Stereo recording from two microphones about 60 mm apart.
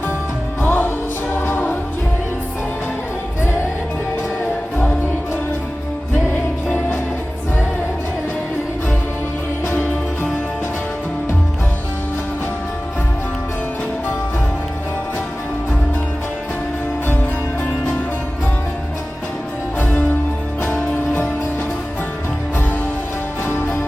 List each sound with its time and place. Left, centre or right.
0.6 s music: left